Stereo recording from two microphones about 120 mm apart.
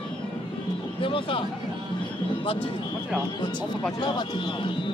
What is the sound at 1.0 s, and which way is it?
Music, 50° left (ahead or behind).